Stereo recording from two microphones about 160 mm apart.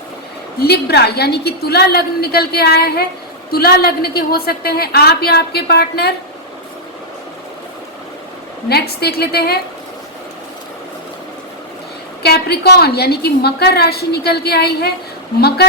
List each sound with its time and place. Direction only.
0.6 s a woman's voice: 85° left
3.5 s a woman's voice: 75° left (ahead or behind)
8.7 s a woman's voice: 90° left
12.2 s a woman's voice: 85° left